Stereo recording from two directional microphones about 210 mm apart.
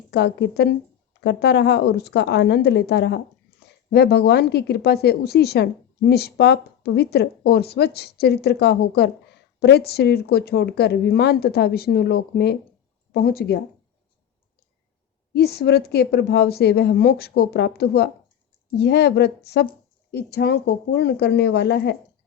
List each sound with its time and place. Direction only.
0.1 s speech: 55° left (ahead or behind)
15.3 s speech: 50° left (ahead or behind)